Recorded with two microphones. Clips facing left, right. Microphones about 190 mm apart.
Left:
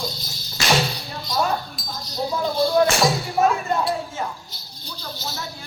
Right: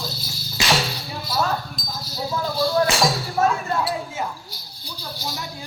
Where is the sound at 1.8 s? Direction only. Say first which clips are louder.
Even; 5° left (ahead or behind).